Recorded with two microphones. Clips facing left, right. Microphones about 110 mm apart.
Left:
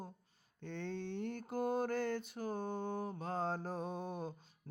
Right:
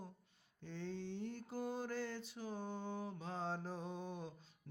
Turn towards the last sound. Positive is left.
turn(degrees=50)  # may be behind; listen again after turning